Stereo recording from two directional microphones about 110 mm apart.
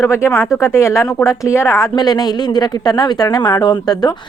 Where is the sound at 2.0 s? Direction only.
40° left (ahead or behind).